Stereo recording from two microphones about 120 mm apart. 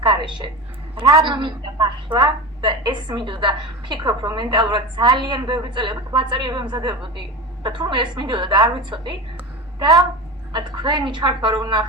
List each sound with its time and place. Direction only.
0.0 s a woman's voice: 40° right (ahead or behind)
10.5 s a woman's voice: 40° right (ahead or behind)